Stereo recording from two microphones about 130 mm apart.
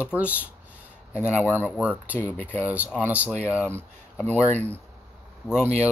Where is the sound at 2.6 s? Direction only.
10° right (ahead or behind).